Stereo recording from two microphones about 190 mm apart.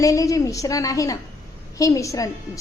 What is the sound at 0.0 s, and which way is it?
A woman's voice, 15° left (ahead or behind).